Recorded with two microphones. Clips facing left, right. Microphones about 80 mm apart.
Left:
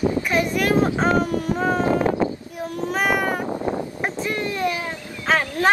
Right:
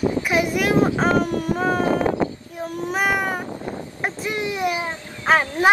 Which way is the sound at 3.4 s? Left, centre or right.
Left.